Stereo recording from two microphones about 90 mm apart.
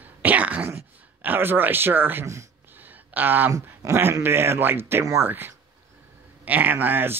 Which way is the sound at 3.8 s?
30° right (ahead or behind).